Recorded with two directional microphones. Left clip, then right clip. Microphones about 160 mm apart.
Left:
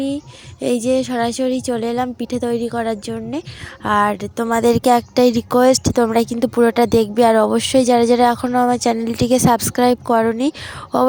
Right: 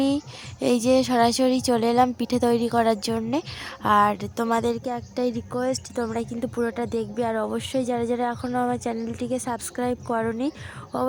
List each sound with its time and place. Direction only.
0.6 s a woman's voice: 5° left (ahead or behind)
3.8 s a woman's voice: 15° left (ahead or behind)
4.8 s speech: 55° left (ahead or behind); by 11.1 s 35° left (ahead or behind)